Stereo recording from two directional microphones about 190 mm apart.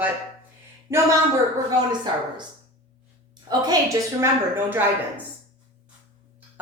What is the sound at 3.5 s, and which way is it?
Speech, 20° right (ahead or behind).